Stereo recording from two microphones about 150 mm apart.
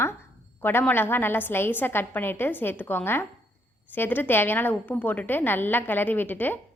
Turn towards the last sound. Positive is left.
turn(degrees=10)  # may be behind; listen again after turning